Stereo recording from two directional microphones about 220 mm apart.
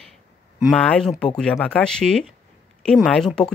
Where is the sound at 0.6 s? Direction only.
5° left (ahead or behind).